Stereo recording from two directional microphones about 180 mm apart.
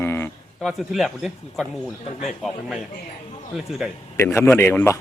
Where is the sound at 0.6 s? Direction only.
Centre (ahead or behind).